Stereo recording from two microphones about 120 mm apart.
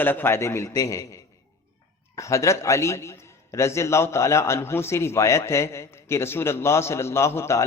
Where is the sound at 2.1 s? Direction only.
25° left (ahead or behind).